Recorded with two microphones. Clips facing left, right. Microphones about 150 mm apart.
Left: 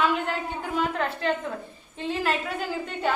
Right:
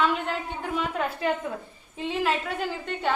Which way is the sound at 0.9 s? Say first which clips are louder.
Even; 10° right (ahead or behind).